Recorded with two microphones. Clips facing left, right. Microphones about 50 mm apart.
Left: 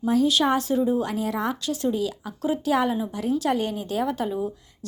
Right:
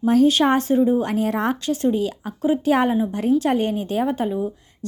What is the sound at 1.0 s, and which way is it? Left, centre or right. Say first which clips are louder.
Speech: right 5 dB; right.